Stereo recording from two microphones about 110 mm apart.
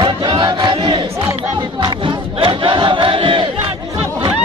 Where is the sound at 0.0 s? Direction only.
45° right (ahead or behind).